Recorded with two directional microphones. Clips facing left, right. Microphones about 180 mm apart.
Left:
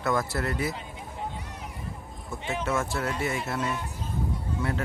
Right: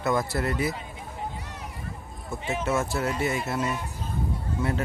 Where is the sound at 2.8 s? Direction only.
20° right (ahead or behind).